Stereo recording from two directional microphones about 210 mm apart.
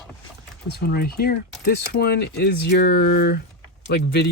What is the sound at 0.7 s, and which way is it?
Speech, 45° left (ahead or behind).